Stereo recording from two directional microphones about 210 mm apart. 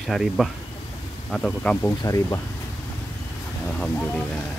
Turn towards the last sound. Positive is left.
turn(degrees=5)  # may be behind; listen again after turning